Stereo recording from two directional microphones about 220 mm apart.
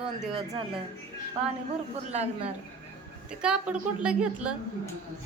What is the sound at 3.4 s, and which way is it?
A woman's voice, 5° right (ahead or behind).